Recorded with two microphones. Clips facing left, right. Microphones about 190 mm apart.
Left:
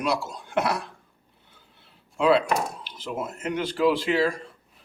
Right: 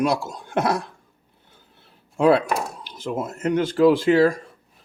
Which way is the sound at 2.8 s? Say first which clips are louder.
Right 4 dB; 45° right (ahead or behind).